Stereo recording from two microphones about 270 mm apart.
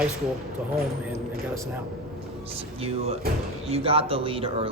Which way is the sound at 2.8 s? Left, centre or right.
Right.